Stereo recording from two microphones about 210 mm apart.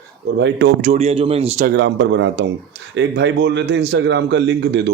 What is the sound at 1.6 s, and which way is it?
A man's voice, 60° right (ahead or behind).